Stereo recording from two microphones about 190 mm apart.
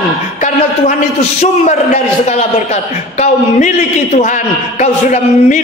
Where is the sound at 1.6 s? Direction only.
40° left (ahead or behind).